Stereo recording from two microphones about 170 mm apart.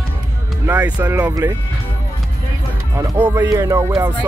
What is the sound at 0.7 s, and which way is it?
Music, 10° right (ahead or behind).